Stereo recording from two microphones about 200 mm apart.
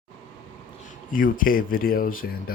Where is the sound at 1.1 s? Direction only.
45° left (ahead or behind).